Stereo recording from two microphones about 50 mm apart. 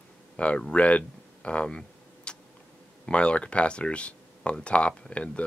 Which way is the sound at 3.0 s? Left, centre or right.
Left.